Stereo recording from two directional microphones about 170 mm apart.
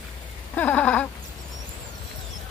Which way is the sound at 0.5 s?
10° left (ahead or behind).